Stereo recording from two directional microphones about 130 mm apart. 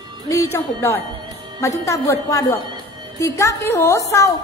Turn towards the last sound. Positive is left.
turn(degrees=25)  # may be behind; listen again after turning